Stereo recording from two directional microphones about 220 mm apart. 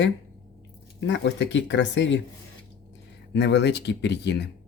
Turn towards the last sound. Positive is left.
turn(degrees=50)  # may be behind; listen again after turning